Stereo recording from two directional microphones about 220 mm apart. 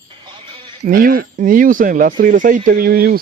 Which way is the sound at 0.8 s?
40° right (ahead or behind).